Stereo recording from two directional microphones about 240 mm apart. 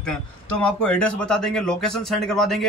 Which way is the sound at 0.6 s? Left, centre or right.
Centre.